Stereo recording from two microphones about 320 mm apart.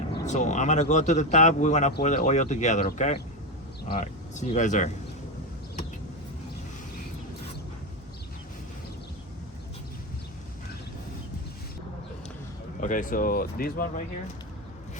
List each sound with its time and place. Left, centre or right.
0.1 s speech: centre
12.8 s speech: left